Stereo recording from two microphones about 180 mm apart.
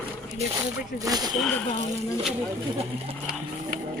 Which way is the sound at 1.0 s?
20° right (ahead or behind).